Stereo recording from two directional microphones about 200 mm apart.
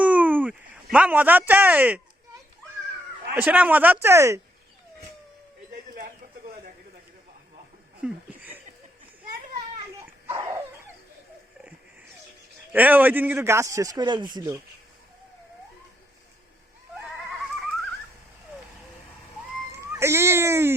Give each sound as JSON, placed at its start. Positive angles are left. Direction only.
{"t": 0.0, "sound": "a sound", "side_deg": -5}
{"t": 3.3, "sound": "a man's voice", "side_deg": -10}
{"t": 5.7, "sound": "chicken", "side_deg": -45}
{"t": 8.0, "sound": "a sound", "side_deg": -10}
{"t": 10.0, "sound": "dog", "side_deg": -15}
{"t": 12.7, "sound": "a man's voice", "side_deg": -10}
{"t": 20.0, "sound": "a man's voice", "side_deg": -10}